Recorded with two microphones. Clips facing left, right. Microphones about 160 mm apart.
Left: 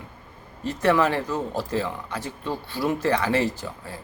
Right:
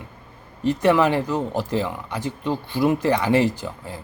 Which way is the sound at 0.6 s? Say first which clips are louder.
Right 3 dB; 15° right (ahead or behind).